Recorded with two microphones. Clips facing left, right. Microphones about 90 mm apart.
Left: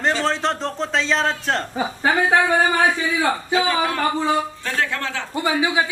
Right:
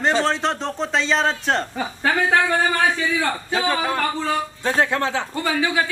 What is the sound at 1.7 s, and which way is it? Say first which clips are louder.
Speech: left 2 dB; 15° left (ahead or behind).